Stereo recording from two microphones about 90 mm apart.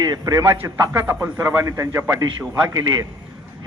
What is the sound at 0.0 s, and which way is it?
A man's voice, 45° right (ahead or behind).